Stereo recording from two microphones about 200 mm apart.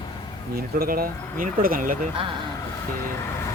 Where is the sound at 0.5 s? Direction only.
50° right (ahead or behind).